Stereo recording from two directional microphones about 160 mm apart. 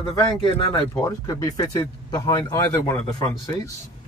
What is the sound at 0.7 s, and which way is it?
Speech, 20° left (ahead or behind).